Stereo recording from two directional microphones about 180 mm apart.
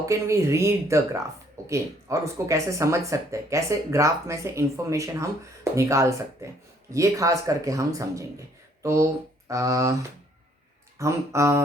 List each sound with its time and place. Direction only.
0.0 s speech: 15° right (ahead or behind)